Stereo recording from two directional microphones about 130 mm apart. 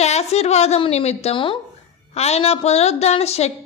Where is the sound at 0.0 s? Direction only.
55° left (ahead or behind).